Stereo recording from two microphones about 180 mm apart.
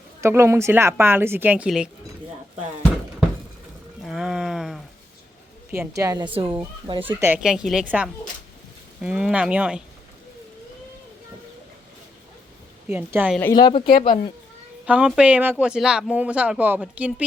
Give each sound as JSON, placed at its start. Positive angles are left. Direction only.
{"t": 0.2, "sound": "speech", "side_deg": -15}
{"t": 4.0, "sound": "a sound", "side_deg": -5}
{"t": 6.0, "sound": "a woman's voice", "side_deg": -20}
{"t": 7.2, "sound": "a woman's voice", "side_deg": -5}
{"t": 12.9, "sound": "speech", "side_deg": -10}
{"t": 13.5, "sound": "speech", "side_deg": 25}
{"t": 14.8, "sound": "speech", "side_deg": -5}